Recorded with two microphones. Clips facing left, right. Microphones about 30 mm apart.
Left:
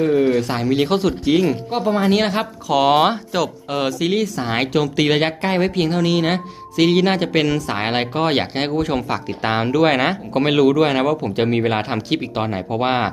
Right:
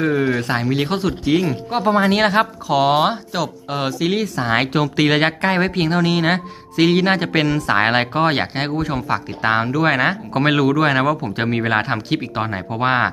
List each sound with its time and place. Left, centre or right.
0.0 s speech: centre
1.8 s speech: right
2.2 s speech: right
2.6 s speech: centre
2.9 s speech: centre
4.0 s a woman's voice: right
4.6 s a woman's voice: centre
6.9 s speech: centre
8.2 s speech: centre
10.4 s speech: centre